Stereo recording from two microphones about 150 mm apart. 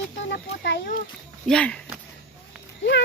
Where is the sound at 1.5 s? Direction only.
5° left (ahead or behind).